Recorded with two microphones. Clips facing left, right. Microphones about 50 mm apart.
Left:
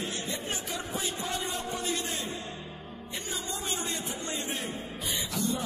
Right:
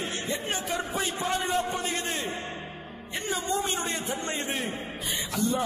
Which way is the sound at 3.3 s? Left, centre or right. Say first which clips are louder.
Right 7 dB; right.